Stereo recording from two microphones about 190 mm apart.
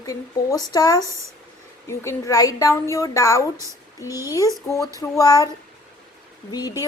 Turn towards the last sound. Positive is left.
turn(degrees=20)  # may be behind; listen again after turning